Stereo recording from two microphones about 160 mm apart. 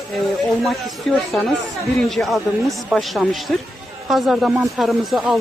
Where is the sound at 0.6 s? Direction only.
Centre (ahead or behind).